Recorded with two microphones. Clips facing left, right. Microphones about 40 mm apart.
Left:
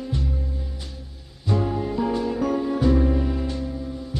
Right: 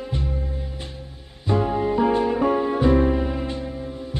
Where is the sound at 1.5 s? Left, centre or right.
Right.